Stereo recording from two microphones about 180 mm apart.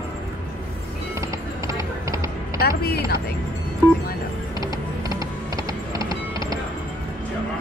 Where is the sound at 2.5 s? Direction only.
60° left (ahead or behind).